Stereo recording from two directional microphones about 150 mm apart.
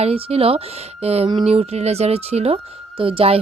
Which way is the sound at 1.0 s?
45° right (ahead or behind).